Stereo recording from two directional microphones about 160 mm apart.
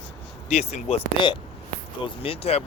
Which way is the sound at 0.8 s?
35° left (ahead or behind).